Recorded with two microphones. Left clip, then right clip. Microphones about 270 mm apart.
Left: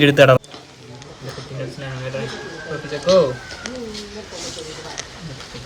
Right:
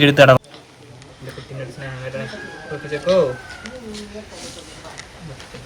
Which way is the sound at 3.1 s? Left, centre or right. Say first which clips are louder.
Left 2 dB; centre.